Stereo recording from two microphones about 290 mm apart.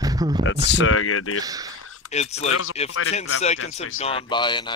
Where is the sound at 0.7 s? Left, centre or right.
Left.